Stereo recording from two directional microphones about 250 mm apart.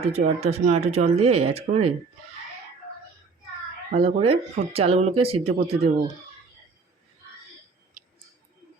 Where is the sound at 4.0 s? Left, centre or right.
Right.